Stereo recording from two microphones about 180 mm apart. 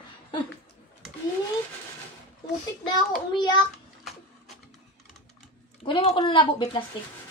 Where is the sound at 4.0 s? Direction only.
Centre (ahead or behind).